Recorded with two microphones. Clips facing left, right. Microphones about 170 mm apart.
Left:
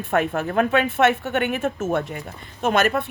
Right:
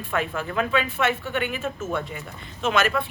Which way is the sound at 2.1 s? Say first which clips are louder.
Left 3 dB; 50° left (ahead or behind).